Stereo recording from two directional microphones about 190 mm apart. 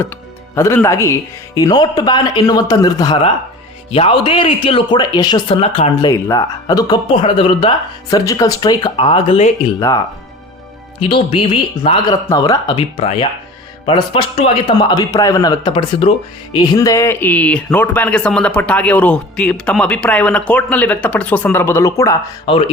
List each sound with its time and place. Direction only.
0.5 s speech: 15° left (ahead or behind); by 6.1 s 30° left (ahead or behind)
6.1 s speech: 20° left (ahead or behind)
11.1 s speech: 30° left (ahead or behind)